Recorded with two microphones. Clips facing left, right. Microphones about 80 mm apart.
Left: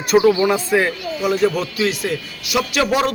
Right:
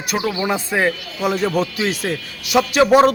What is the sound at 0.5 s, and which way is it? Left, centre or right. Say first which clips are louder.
Speech: left 1 dB; right.